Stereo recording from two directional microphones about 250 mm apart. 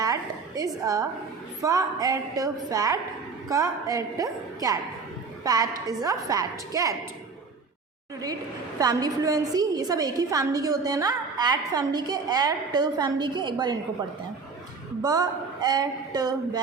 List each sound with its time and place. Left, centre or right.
0.0 s a sound: centre
1.6 s a woman's voice: centre
8.8 s a woman's voice: centre
15.0 s a woman's voice: centre